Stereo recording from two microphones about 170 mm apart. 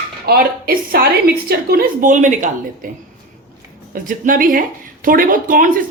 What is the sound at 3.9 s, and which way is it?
Speech, 50° right (ahead or behind).